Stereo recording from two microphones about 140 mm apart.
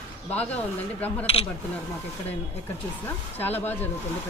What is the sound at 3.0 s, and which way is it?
Speech, 15° left (ahead or behind).